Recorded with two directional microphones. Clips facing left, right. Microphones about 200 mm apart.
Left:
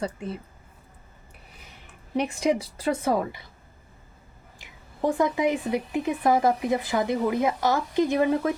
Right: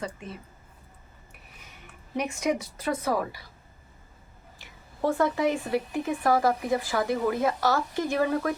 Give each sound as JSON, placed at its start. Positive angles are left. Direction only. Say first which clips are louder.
{"t": 2.1, "sound": "speech", "louder": "left 3 dB", "side_deg": 30}
{"t": 4.5, "sound": "speech", "louder": "left 1 dB", "side_deg": 15}